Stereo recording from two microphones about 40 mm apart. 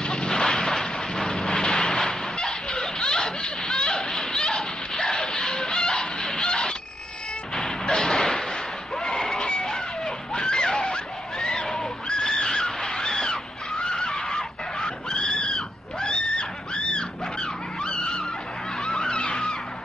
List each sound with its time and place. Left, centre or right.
0.0 s vehicle: left
3.0 s snicker: centre
7.5 s music: centre
8.9 s a sound: centre
18.9 s music: left